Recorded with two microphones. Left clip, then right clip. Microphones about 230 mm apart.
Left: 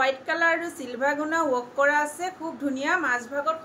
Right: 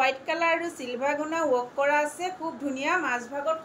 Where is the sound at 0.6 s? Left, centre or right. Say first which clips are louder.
Left 2 dB; left.